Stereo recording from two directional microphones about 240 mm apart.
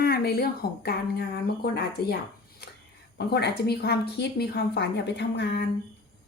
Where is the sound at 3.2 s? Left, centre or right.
Left.